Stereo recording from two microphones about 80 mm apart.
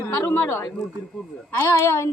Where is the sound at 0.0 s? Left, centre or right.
Left.